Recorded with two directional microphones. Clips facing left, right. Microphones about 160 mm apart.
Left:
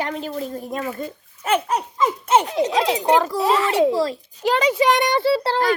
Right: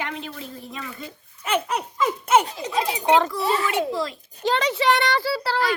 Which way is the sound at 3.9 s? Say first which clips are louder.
Left 6 dB; 30° left (ahead or behind).